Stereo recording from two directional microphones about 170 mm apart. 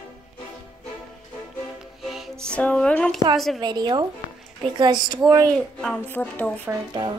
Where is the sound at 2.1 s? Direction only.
Centre (ahead or behind).